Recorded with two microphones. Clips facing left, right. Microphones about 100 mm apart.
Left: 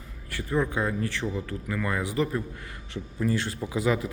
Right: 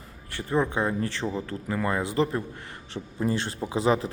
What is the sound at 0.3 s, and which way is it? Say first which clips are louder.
Speech: right 1 dB; 30° right (ahead or behind).